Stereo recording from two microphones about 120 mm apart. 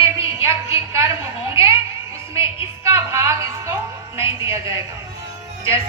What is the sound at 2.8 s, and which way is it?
Music, 25° right (ahead or behind).